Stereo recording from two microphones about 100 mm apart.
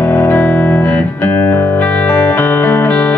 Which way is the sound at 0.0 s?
15° left (ahead or behind).